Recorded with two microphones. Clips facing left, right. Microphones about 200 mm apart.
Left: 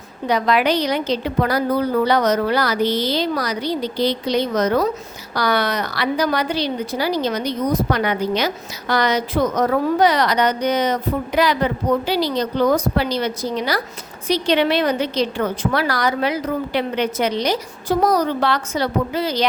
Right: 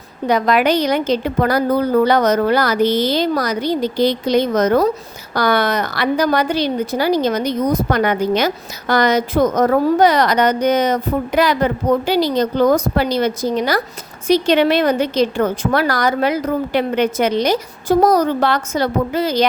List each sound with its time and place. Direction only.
0.3 s a woman's voice: 50° right (ahead or behind)